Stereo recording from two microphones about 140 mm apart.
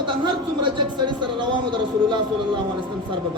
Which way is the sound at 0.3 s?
35° right (ahead or behind).